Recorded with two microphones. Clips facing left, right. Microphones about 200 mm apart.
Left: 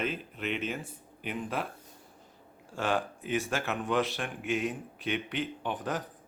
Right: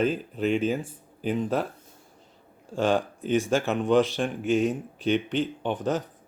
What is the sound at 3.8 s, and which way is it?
Speech, 30° right (ahead or behind).